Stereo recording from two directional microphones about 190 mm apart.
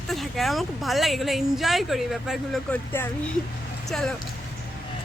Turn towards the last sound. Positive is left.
turn(degrees=5)  # may be behind; listen again after turning